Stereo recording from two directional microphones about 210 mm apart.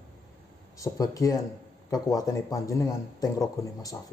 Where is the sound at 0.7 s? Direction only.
15° left (ahead or behind).